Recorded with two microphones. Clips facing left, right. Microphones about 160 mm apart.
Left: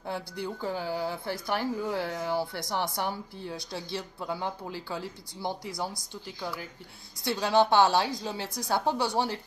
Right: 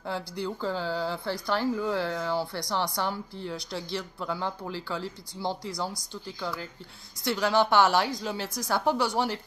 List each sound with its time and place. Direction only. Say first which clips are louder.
0.0 s speech: right 2 dB; 20° left (ahead or behind)
7.2 s speech: even; 20° left (ahead or behind)